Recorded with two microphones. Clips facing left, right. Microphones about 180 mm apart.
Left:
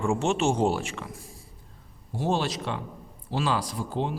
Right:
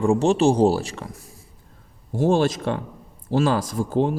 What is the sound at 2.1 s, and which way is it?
A man's voice, 50° right (ahead or behind).